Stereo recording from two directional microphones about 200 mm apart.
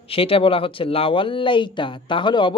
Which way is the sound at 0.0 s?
30° left (ahead or behind).